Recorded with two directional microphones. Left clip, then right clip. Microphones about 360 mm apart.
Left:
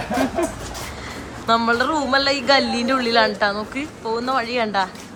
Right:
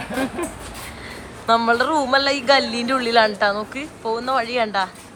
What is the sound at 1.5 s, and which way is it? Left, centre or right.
Speech, centre.